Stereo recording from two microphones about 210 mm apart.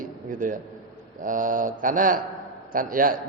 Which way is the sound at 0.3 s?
40° right (ahead or behind).